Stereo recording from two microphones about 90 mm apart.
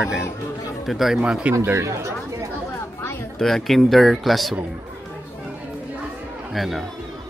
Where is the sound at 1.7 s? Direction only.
30° right (ahead or behind).